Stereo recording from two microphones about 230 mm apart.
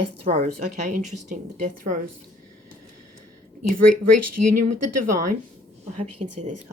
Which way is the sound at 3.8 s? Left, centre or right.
Right.